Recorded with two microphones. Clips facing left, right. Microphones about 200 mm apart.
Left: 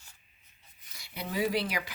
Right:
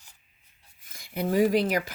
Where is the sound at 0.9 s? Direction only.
50° right (ahead or behind).